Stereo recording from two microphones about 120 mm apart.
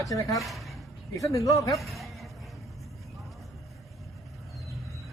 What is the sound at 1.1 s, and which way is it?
Speech, 25° left (ahead or behind).